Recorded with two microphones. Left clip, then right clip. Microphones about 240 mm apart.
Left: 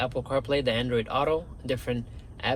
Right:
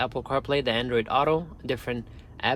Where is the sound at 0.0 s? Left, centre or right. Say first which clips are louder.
Right 1 dB; right.